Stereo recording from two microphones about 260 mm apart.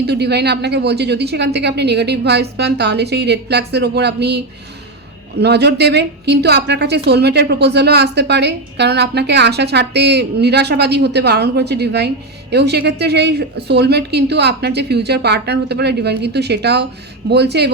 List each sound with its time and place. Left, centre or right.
0.0 s a woman's voice: right